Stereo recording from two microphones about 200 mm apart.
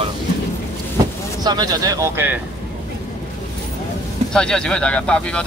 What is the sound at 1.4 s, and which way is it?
Speech, 20° right (ahead or behind).